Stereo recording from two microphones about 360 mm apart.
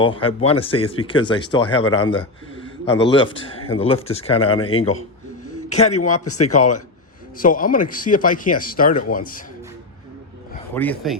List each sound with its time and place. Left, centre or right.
0.0 s speech: centre
5.9 s a man's voice: left
7.3 s speech: left
10.8 s speech: centre